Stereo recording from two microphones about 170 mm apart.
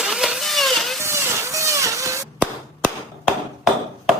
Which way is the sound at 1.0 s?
15° right (ahead or behind).